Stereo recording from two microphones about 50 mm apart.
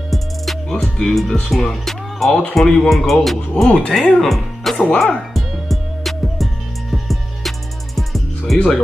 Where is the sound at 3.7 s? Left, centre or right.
Left.